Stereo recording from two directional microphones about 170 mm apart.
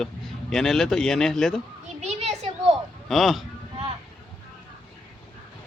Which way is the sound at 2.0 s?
40° right (ahead or behind).